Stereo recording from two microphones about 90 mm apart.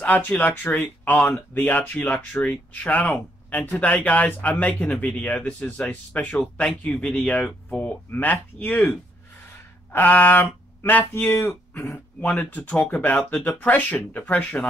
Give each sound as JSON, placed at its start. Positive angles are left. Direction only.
{"t": 0.0, "sound": "speech", "side_deg": 15}
{"t": 9.9, "sound": "speech", "side_deg": 20}